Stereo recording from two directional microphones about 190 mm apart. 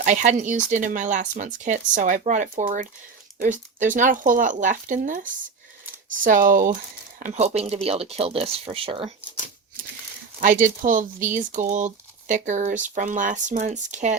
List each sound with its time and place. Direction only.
0.0 s speech: 40° right (ahead or behind)
10.4 s speech: 45° right (ahead or behind)